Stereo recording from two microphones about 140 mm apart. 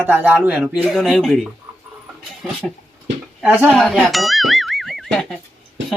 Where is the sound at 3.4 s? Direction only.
10° right (ahead or behind).